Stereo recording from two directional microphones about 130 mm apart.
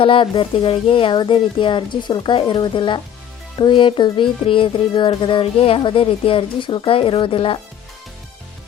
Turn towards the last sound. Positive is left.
turn(degrees=45)  # may be behind; listen again after turning